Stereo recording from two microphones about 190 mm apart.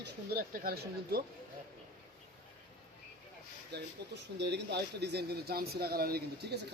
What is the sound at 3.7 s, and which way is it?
Speech, 60° right (ahead or behind).